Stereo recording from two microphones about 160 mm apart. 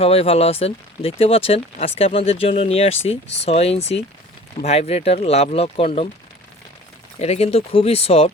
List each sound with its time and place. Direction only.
0.0 s speech: 40° left (ahead or behind)
7.2 s speech: 40° left (ahead or behind)